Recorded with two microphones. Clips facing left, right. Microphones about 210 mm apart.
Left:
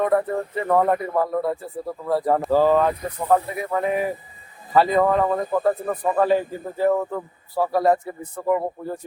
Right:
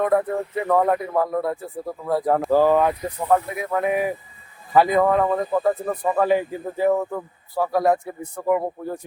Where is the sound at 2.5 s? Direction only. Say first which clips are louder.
Right 1 dB; 10° right (ahead or behind).